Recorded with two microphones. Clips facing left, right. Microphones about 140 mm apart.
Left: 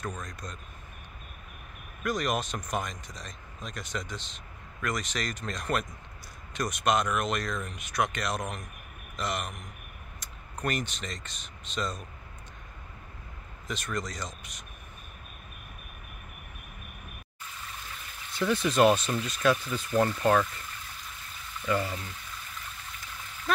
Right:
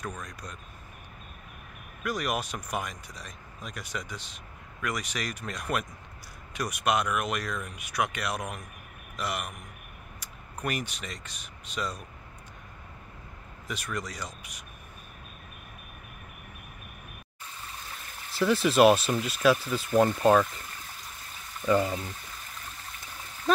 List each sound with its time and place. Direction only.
0.0 s speech: 10° right (ahead or behind)
2.0 s speech: 10° right (ahead or behind)
13.7 s speech: 10° right (ahead or behind)
18.4 s speech: 5° right (ahead or behind)
21.5 s speech: 25° right (ahead or behind)